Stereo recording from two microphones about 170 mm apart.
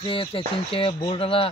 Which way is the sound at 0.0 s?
30° left (ahead or behind).